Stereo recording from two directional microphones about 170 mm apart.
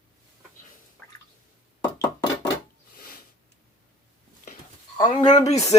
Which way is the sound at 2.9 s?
60° left (ahead or behind).